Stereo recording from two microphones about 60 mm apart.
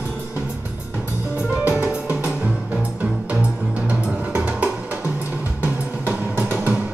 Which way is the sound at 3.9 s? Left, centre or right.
Right.